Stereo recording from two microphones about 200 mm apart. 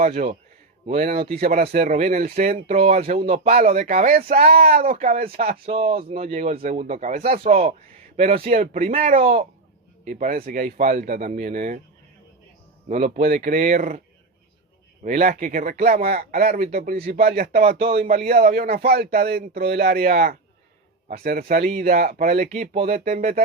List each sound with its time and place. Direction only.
0.0 s speech: 40° right (ahead or behind)
1.4 s speech: 45° right (ahead or behind)
5.6 s speech: 30° right (ahead or behind)
12.9 s speech: 40° right (ahead or behind)
15.0 s speech: 35° right (ahead or behind)